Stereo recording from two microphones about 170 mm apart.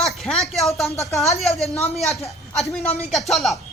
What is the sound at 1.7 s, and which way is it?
Speech, 40° left (ahead or behind).